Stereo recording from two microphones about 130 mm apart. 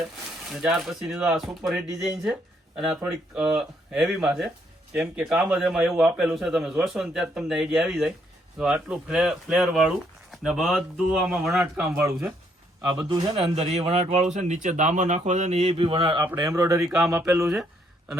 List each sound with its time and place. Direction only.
0.5 s a man's voice: 5° right (ahead or behind)
13.0 s a man's voice: 40° right (ahead or behind)
14.3 s a man's voice: 70° right (ahead or behind); by 16.2 s 40° right (ahead or behind)
16.3 s speech: 25° right (ahead or behind)
16.8 s a man's voice: 5° right (ahead or behind)